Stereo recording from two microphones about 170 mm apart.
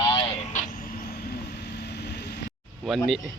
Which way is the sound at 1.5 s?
80° left.